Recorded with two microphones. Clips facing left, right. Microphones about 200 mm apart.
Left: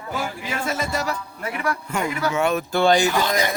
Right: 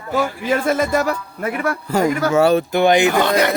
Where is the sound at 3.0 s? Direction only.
60° right (ahead or behind).